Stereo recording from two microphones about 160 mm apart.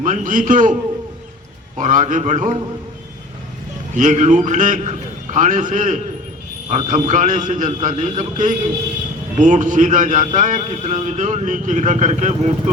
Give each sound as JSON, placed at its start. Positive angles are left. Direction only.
{"t": 0.0, "sound": "a man's voice", "side_deg": -55}
{"t": 1.8, "sound": "a man's voice", "side_deg": -50}
{"t": 3.9, "sound": "a man's voice", "side_deg": -50}